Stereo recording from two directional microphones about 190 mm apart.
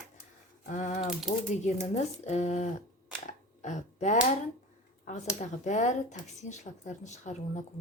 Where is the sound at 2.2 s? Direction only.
35° left (ahead or behind).